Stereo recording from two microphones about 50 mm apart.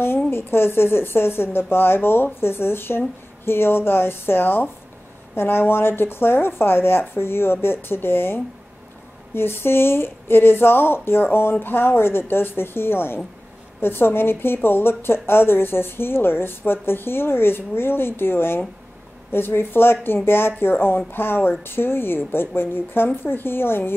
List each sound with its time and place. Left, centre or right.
0.0 s a woman's voice: left